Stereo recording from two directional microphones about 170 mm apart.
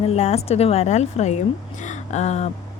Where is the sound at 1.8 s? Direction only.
45° left (ahead or behind).